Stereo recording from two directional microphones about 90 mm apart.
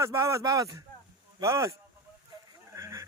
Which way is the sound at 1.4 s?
35° right (ahead or behind).